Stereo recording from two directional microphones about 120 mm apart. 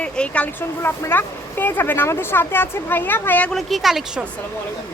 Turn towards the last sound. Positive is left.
turn(degrees=0)  # may be behind; listen again after turning